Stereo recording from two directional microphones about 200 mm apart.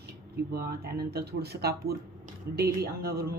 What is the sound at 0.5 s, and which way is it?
Speech, 50° right (ahead or behind).